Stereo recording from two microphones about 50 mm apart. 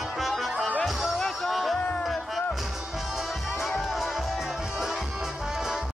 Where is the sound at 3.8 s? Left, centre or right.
Centre.